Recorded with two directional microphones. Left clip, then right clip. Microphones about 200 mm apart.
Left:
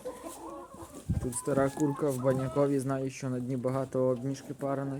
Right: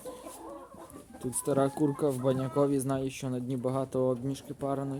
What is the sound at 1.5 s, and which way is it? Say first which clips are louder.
Speech: right 1 dB; 15° right (ahead or behind).